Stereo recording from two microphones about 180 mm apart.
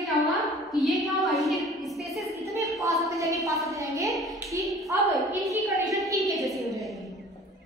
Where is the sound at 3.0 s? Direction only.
20° right (ahead or behind).